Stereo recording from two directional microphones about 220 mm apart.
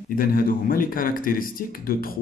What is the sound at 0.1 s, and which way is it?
Speech, 40° left (ahead or behind).